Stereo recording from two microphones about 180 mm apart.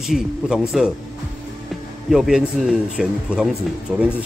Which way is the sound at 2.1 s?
5° right (ahead or behind).